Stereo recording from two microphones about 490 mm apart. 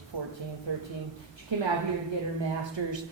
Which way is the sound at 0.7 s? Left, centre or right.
Right.